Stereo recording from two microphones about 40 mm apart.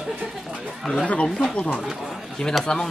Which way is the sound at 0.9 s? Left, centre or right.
Left.